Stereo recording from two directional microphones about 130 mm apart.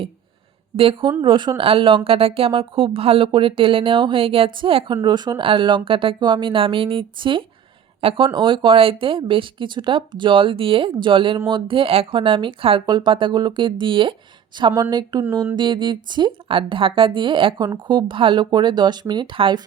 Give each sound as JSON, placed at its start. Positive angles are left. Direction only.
{"t": 0.8, "sound": "speech", "side_deg": -45}